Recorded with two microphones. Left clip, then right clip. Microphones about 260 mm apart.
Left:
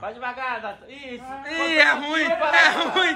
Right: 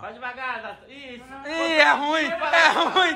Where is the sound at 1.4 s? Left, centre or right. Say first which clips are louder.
Even; centre.